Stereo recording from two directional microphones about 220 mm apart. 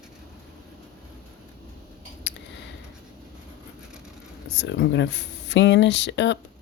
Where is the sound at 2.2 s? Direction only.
55° left (ahead or behind).